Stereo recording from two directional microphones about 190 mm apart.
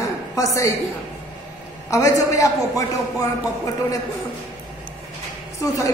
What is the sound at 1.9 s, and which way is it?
Speech, 15° left (ahead or behind).